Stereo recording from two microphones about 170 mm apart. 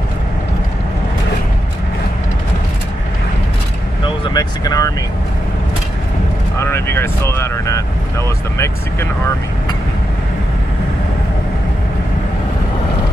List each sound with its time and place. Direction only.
4.0 s vehicle: 25° left (ahead or behind)
6.6 s speech: 15° left (ahead or behind)